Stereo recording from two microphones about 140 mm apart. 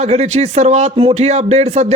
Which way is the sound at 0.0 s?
50° right (ahead or behind).